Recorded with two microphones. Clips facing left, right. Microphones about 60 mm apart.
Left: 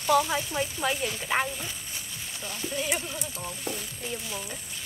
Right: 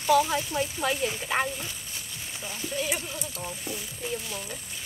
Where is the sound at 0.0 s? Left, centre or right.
Centre.